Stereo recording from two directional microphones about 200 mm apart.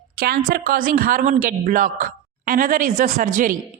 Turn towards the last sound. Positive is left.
turn(degrees=-40)  # may be behind; listen again after turning